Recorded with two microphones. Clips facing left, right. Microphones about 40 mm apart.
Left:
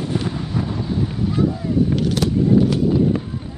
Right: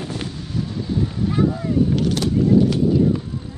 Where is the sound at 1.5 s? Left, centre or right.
Centre.